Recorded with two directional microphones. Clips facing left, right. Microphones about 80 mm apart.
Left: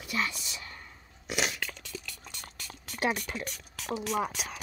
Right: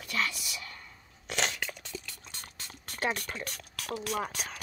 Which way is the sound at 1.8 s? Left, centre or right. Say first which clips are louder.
Even; right.